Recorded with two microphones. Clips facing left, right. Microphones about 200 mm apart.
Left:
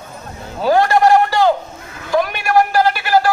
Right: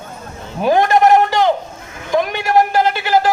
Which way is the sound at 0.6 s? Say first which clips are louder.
Even; 20° right (ahead or behind).